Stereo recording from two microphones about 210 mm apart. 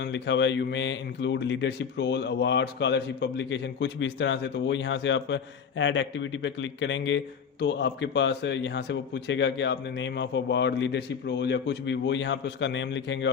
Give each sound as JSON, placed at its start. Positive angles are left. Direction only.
{"t": 0.0, "sound": "speech", "side_deg": 55}